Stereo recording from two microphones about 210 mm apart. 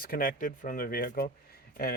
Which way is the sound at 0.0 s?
45° left (ahead or behind).